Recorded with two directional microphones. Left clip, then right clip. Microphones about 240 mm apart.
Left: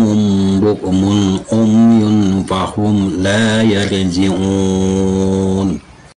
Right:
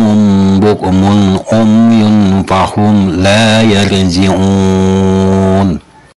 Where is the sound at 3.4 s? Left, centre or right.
Right.